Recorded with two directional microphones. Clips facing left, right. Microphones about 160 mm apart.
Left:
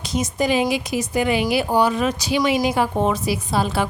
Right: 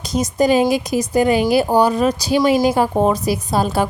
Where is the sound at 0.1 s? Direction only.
40° right (ahead or behind).